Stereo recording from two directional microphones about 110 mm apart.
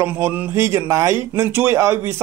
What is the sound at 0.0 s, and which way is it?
A man's voice, 25° right (ahead or behind).